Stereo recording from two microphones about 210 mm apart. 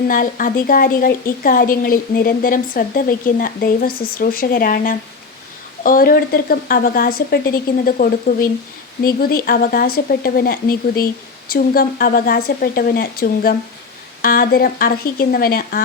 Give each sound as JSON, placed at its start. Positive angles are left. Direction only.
{"t": 0.1, "sound": "a woman's voice", "side_deg": 40}